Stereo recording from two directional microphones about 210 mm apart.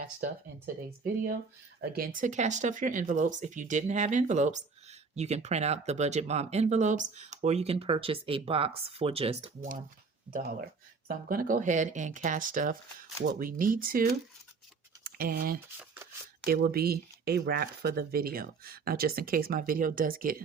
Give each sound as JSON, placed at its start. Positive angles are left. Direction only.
{"t": 0.0, "sound": "speech", "side_deg": -40}
{"t": 10.3, "sound": "speech", "side_deg": -5}
{"t": 11.1, "sound": "speech", "side_deg": -40}